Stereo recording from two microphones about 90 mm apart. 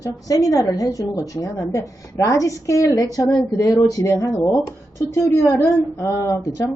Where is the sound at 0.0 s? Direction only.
40° left (ahead or behind).